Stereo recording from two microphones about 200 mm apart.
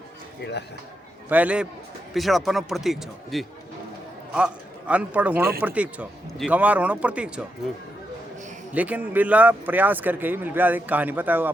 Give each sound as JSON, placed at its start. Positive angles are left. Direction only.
{"t": 0.4, "sound": "a man's voice", "side_deg": 55}
{"t": 1.3, "sound": "speech", "side_deg": -5}
{"t": 8.7, "sound": "speech", "side_deg": -5}